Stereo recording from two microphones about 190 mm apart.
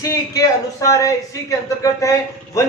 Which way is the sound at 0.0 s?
15° left (ahead or behind).